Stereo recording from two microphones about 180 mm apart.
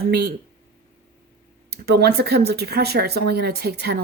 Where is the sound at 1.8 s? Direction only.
60° right (ahead or behind).